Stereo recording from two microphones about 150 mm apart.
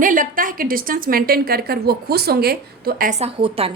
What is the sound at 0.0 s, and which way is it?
A woman's voice, 60° right (ahead or behind).